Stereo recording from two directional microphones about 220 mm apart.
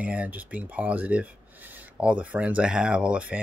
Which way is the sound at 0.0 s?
5° right (ahead or behind).